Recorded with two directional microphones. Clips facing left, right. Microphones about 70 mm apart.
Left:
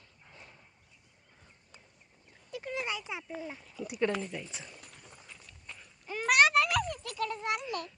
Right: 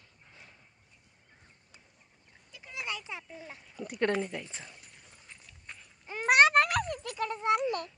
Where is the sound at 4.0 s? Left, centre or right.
Right.